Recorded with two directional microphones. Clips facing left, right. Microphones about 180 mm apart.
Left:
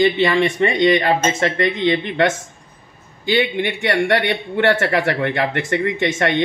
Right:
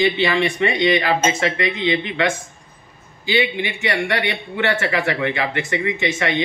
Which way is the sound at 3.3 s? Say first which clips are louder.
Left 2 dB; 50° left (ahead or behind).